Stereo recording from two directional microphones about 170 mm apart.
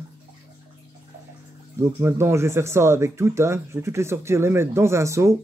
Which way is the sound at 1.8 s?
15° right (ahead or behind).